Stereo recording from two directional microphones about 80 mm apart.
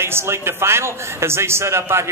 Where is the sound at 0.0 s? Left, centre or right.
Right.